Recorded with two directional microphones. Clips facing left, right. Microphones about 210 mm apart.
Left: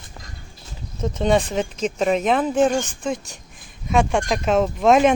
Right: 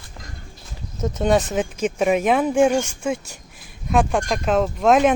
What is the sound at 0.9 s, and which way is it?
Speech, 5° right (ahead or behind).